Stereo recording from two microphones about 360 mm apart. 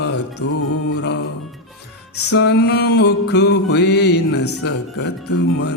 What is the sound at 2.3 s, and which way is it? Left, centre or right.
Music, left.